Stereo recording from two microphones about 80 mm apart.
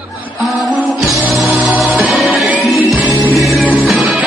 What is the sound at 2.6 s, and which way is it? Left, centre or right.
Music, centre.